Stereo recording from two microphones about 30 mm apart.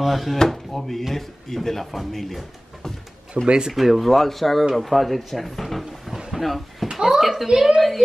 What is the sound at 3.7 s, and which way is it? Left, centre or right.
Speech, centre.